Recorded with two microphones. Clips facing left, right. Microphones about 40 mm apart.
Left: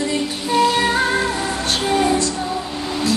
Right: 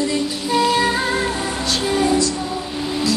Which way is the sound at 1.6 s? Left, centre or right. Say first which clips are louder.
Left 1 dB; left.